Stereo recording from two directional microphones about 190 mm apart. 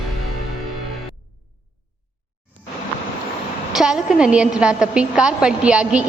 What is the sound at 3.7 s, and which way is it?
A woman's voice, 5° right (ahead or behind).